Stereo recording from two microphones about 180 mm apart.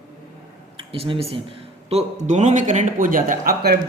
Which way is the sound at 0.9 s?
30° right (ahead or behind).